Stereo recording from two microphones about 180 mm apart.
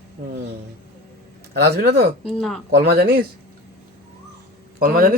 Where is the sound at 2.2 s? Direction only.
5° left (ahead or behind).